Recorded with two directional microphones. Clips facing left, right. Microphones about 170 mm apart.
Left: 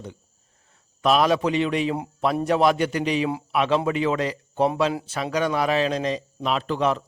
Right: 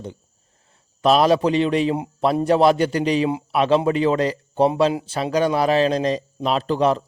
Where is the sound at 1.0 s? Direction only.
35° right (ahead or behind).